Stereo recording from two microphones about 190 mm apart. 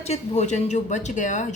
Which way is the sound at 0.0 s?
35° left (ahead or behind).